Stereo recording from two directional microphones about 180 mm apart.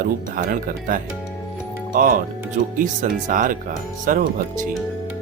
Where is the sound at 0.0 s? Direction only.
50° right (ahead or behind).